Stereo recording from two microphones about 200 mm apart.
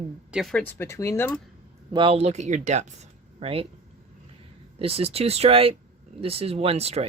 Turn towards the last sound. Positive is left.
turn(degrees=-30)  # may be behind; listen again after turning